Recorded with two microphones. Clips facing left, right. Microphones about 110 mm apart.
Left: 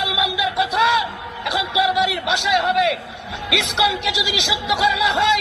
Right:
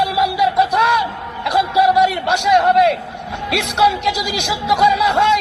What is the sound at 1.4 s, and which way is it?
Speech, 50° right (ahead or behind).